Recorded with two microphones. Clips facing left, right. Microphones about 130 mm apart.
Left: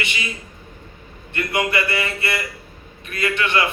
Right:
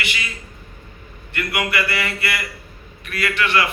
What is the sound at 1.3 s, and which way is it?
A man's voice, 25° left (ahead or behind).